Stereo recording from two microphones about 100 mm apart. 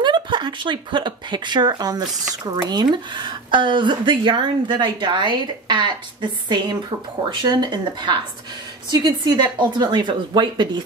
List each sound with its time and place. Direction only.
0.0 s speech: 50° right (ahead or behind)